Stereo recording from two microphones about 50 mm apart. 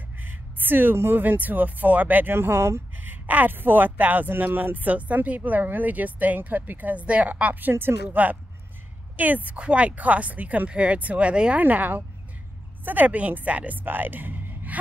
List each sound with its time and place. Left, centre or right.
0.2 s a sound: right
1.1 s speech: right
2.3 s speech: right
3.0 s speech: right
7.8 s speech: right
9.1 s speech: right
11.6 s speech: right
13.8 s music: right